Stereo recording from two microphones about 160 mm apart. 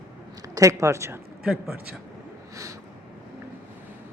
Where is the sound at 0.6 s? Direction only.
20° right (ahead or behind).